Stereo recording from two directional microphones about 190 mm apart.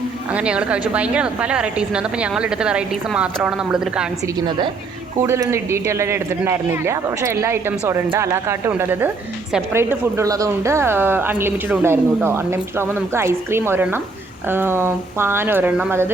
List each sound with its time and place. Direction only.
0.3 s a woman's voice: 5° right (ahead or behind)
4.4 s a woman's voice: 25° right (ahead or behind)
5.2 s speech: 15° right (ahead or behind)